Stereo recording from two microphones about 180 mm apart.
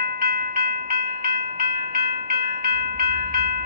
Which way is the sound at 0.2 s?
60° right (ahead or behind).